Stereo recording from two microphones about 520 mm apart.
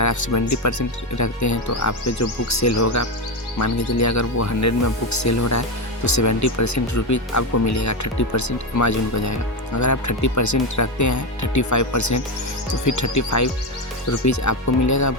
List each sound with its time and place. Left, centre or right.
0.0 s speech: left